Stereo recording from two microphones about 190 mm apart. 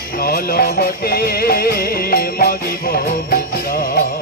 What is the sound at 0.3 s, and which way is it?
Music, 50° left (ahead or behind).